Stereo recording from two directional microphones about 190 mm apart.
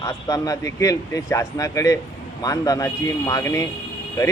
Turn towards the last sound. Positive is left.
turn(degrees=20)  # may be behind; listen again after turning